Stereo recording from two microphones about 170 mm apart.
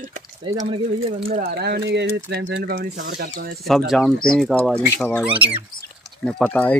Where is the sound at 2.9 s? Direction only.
55° right (ahead or behind).